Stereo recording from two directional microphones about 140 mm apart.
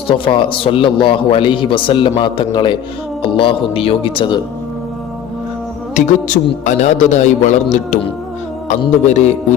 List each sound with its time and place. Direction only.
0.1 s a man's voice: 35° left (ahead or behind)
5.9 s speech: 65° left (ahead or behind)
9.0 s speech: 55° left (ahead or behind)